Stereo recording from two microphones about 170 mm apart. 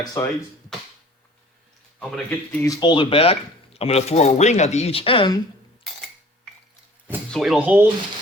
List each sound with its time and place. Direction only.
0.2 s speech: 15° left (ahead or behind)
2.0 s speech: 5° left (ahead or behind)
2.8 s speech: 30° left (ahead or behind)
7.3 s speech: centre (ahead or behind)